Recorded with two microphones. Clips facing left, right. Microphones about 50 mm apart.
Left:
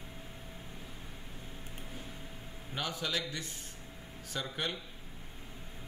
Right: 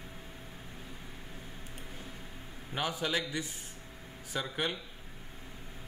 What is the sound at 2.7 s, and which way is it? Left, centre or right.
A man's voice, centre.